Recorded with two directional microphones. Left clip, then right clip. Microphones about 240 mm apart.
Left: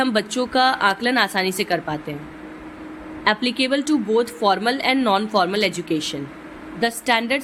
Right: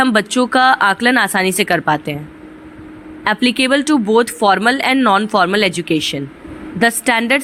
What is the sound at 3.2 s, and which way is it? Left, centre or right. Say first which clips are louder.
A woman's voice: right 5 dB; right.